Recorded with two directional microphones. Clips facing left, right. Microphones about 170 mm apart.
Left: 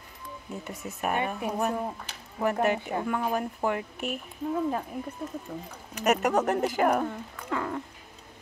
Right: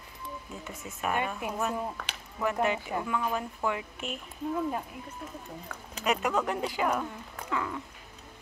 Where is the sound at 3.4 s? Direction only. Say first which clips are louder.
Left 3 dB; 50° left (ahead or behind).